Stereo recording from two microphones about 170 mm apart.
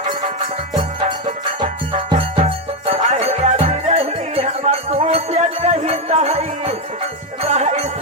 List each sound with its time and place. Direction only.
1.6 s music: 30° right (ahead or behind)